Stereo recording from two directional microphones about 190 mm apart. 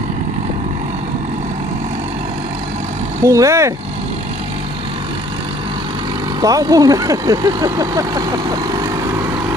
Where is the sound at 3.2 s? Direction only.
15° right (ahead or behind).